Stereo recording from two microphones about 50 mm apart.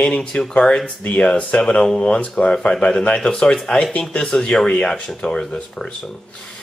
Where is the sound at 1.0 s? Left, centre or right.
Left.